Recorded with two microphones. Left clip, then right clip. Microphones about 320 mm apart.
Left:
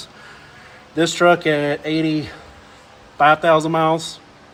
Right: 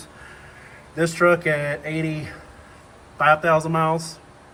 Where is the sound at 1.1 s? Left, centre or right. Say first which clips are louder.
Left 3 dB; left.